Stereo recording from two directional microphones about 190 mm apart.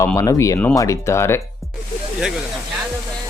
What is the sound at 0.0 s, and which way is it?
Speech, 15° left (ahead or behind).